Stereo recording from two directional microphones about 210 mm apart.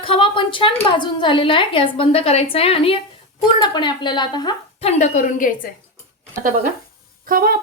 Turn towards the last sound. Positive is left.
turn(degrees=-45)  # may be behind; listen again after turning